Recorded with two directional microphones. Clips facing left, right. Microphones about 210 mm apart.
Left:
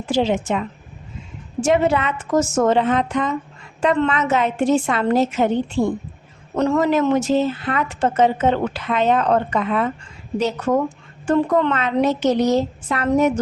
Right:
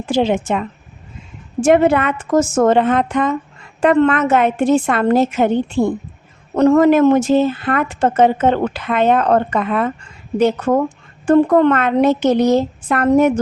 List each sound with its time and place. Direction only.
0.1 s a woman's voice: 55° right (ahead or behind)
1.6 s a woman's voice: 55° right (ahead or behind)